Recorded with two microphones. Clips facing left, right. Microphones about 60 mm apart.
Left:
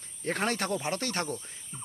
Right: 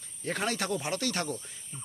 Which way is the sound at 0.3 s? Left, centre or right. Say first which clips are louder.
Left 1 dB; left.